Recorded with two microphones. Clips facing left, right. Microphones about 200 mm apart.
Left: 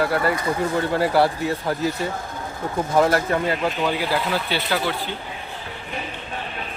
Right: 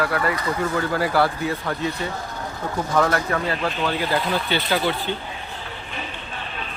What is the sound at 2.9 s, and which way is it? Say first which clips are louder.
Speech: left 2 dB; 25° left (ahead or behind).